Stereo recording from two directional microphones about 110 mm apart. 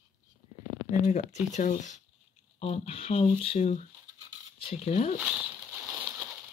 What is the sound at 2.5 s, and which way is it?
Speech, 75° left (ahead or behind).